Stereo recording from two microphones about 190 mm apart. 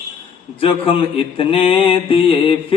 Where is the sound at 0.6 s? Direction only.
30° left (ahead or behind).